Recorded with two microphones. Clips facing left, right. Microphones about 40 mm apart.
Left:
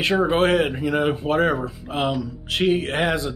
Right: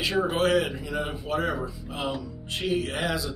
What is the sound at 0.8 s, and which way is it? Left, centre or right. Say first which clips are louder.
Speech: left 9 dB; left.